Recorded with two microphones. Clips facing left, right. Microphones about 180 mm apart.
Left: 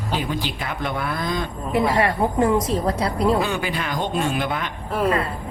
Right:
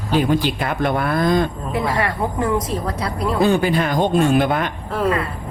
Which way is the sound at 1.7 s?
25° left (ahead or behind).